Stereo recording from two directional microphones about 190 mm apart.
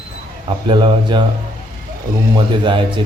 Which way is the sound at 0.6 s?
25° right (ahead or behind).